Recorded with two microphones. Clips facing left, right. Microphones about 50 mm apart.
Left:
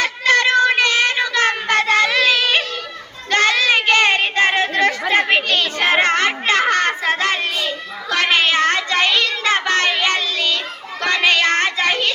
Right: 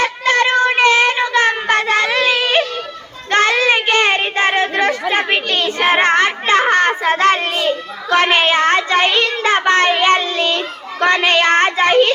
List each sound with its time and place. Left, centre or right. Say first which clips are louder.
0.0 s child singing: right 1 dB; right
3.2 s children playing: right 2 dB; right
3.8 s a sound: even; right
7.2 s child singing: right 5 dB; right